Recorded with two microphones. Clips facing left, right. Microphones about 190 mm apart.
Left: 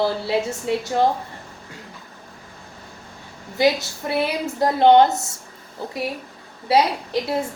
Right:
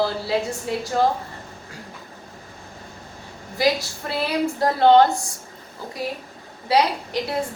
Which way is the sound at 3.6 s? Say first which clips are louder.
Left 2 dB; 25° left (ahead or behind).